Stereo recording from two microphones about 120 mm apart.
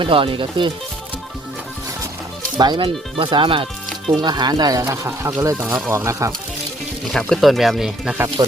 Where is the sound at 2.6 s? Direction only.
40° right (ahead or behind); by 6.3 s 25° right (ahead or behind).